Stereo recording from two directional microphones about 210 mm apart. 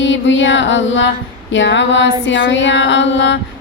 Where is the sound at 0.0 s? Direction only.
60° left (ahead or behind).